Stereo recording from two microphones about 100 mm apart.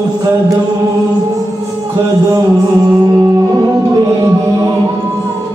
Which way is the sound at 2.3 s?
35° right (ahead or behind).